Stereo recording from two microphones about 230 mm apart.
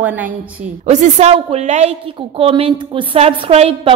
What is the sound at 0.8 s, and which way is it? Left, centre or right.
A woman's voice, right.